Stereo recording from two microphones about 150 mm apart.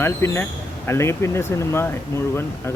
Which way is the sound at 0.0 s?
15° left (ahead or behind).